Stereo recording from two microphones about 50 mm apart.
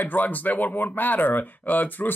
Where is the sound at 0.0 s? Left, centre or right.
Left.